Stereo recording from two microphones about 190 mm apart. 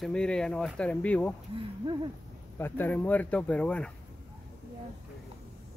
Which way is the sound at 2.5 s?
10° left (ahead or behind).